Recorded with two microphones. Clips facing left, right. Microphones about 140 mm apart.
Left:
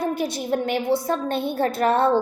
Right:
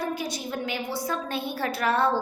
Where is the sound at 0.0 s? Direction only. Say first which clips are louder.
Left 5 dB; 50° left (ahead or behind).